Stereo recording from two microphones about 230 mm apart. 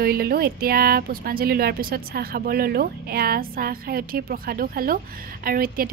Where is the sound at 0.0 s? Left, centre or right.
Right.